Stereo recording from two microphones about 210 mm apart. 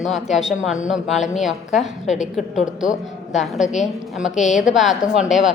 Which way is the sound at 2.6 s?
35° left (ahead or behind).